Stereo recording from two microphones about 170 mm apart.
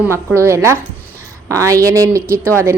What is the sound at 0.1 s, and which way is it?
A woman's voice, 15° right (ahead or behind).